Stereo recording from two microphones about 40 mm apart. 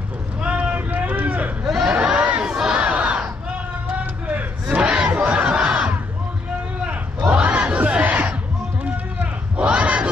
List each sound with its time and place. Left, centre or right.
0.4 s vehicle: right
1.6 s a sound: centre
1.9 s a sound: right
2.1 s crowd: right
2.5 s battle cry: centre
2.8 s battle cry: right
4.0 s vehicle: right
4.8 s battle cry: centre
5.1 s crowd: right
7.3 s battle cry: right
9.7 s battle cry: right